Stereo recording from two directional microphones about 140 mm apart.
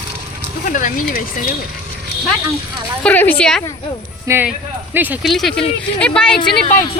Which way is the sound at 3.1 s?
10° left (ahead or behind).